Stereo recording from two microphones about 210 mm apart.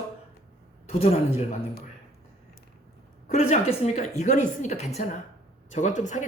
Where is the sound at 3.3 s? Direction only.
30° left (ahead or behind).